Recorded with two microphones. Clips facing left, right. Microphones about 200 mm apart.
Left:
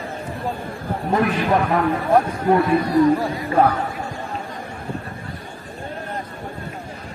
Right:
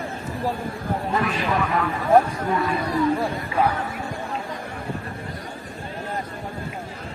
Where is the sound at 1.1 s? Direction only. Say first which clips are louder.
Left 6 dB; 60° left (ahead or behind).